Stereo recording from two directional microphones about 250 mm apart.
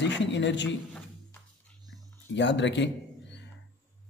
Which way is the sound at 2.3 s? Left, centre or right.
Left.